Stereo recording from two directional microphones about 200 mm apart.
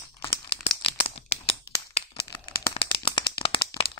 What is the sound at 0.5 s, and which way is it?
Tearing, 30° left (ahead or behind).